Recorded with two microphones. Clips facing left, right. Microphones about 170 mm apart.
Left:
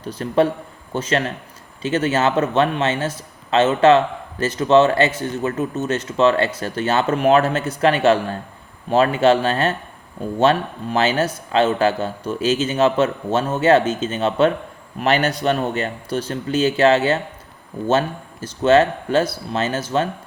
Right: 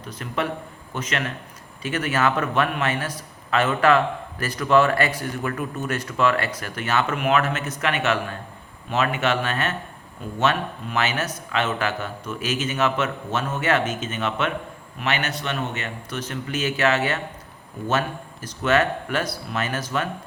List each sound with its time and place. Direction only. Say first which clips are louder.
0.0 s speech: left 9 dB; 30° left (ahead or behind)